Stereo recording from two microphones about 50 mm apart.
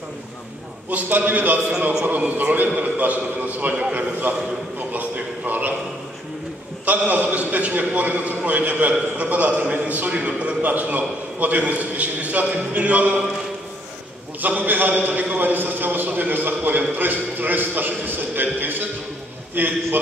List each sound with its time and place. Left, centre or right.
0.8 s a man's voice: right
6.9 s a man's voice: right
14.4 s a man's voice: right